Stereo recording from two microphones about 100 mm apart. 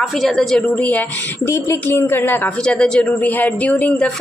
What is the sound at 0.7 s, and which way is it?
Speech, 15° left (ahead or behind).